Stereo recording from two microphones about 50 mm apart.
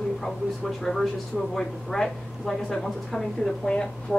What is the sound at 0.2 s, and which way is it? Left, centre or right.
A woman's voice, centre.